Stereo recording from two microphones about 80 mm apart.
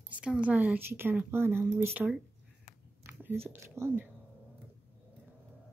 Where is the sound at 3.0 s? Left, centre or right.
Right.